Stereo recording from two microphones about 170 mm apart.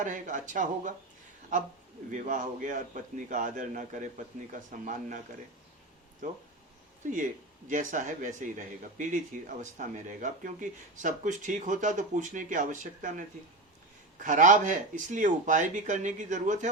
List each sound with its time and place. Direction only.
0.0 s speech: 50° right (ahead or behind)
2.1 s speech: 50° right (ahead or behind)
6.2 s speech: 50° right (ahead or behind)
7.7 s speech: 50° right (ahead or behind)